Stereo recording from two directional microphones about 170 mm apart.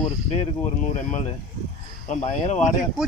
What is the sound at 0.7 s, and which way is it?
Speech, 45° left (ahead or behind).